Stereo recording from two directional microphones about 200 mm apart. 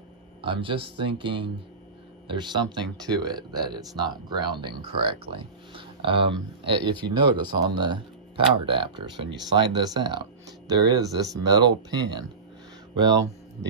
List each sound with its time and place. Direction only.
0.4 s speech: 25° right (ahead or behind)